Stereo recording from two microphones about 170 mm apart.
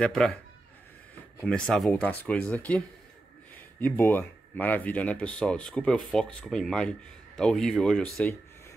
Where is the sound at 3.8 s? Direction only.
10° left (ahead or behind).